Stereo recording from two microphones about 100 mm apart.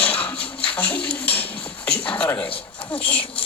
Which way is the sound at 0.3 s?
70° left (ahead or behind).